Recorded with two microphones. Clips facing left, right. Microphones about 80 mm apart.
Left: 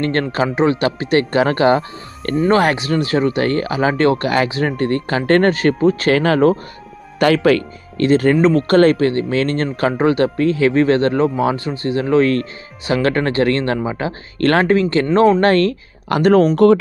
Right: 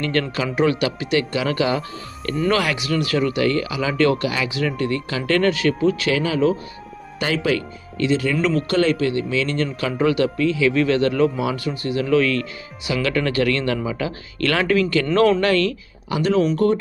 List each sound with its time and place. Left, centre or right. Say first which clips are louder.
0.0 s speech: left 5 dB; left
0.6 s speech: left 2 dB; left
0.8 s speech: left 5 dB; left
15.4 s speech: left 5 dB; left